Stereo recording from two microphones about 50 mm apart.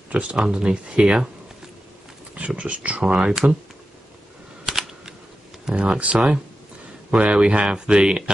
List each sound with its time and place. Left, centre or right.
0.1 s speech: right
2.3 s speech: right
4.6 s computer keyboard: centre
5.7 s speech: right